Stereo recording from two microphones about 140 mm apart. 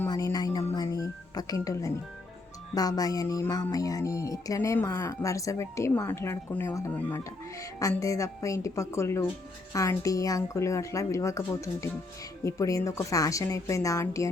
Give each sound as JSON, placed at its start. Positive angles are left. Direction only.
{"t": 0.1, "sound": "music", "side_deg": 25}
{"t": 2.7, "sound": "speech", "side_deg": 25}